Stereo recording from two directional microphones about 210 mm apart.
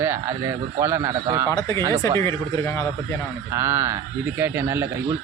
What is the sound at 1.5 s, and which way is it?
Speech, 15° left (ahead or behind).